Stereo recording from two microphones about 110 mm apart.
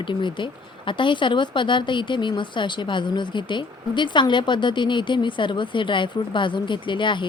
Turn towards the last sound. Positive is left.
turn(degrees=45)  # may be behind; listen again after turning